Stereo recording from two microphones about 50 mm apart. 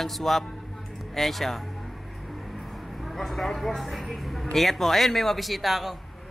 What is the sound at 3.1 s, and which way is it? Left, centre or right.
Speech, centre.